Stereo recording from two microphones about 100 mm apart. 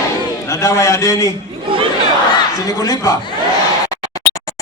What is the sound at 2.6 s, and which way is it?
Speech, 35° left (ahead or behind).